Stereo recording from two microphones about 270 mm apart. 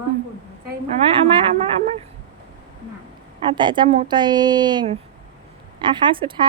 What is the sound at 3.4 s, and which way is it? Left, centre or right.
A woman's voice, centre.